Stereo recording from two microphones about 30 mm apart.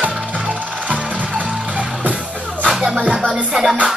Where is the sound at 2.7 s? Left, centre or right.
Centre.